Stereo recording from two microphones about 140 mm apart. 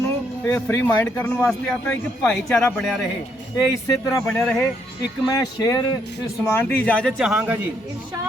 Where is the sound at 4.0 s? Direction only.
20° left (ahead or behind).